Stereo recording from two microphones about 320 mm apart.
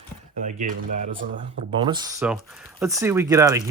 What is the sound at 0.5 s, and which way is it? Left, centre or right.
Speech, right.